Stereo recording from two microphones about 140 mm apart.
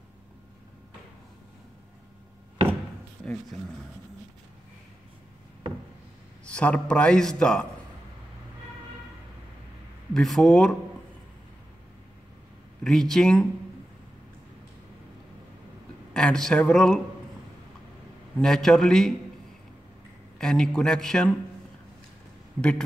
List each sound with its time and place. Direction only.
6.4 s a man's voice: 10° left (ahead or behind)
10.1 s a man's voice: 5° left (ahead or behind)
12.8 s a man's voice: 5° left (ahead or behind)
16.1 s a man's voice: 5° left (ahead or behind)
18.4 s a man's voice: 5° left (ahead or behind)
20.3 s a man's voice: 5° left (ahead or behind)
22.6 s a man's voice: 5° left (ahead or behind)